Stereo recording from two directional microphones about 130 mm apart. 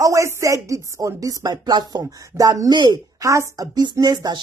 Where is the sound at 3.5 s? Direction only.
30° right (ahead or behind).